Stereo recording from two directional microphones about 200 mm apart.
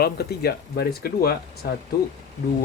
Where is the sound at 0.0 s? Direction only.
50° left (ahead or behind).